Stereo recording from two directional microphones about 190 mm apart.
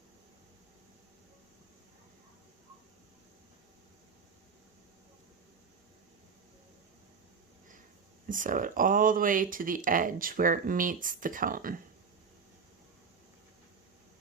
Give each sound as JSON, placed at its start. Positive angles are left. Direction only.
{"t": 8.3, "sound": "speech", "side_deg": -45}